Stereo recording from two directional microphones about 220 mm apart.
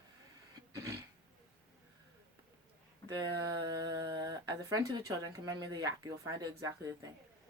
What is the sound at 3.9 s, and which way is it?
Speech, 15° right (ahead or behind).